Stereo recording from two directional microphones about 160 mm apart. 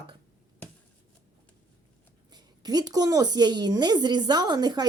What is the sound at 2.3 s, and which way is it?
A woman's voice, 25° right (ahead or behind).